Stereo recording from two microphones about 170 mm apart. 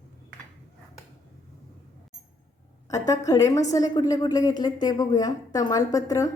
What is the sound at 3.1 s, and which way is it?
A woman's voice, 20° left (ahead or behind).